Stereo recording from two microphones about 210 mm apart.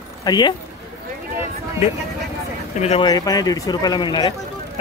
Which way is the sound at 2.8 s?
30° left (ahead or behind).